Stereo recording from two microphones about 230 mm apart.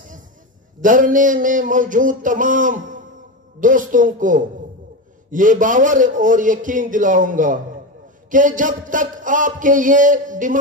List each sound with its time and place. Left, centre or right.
0.7 s a man's voice: right